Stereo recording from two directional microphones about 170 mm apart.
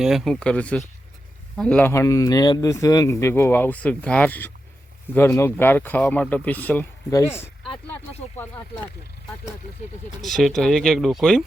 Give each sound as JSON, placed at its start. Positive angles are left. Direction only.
{"t": 0.0, "sound": "speech", "side_deg": 0}
{"t": 10.2, "sound": "speech", "side_deg": 0}